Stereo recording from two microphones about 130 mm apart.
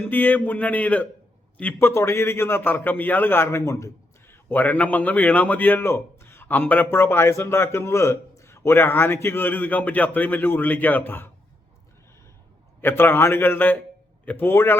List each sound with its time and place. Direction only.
0.0 s a man's voice: 15° left (ahead or behind)
12.8 s a man's voice: 15° left (ahead or behind)